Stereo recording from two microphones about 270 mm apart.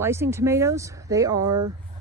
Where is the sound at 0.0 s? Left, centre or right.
Centre.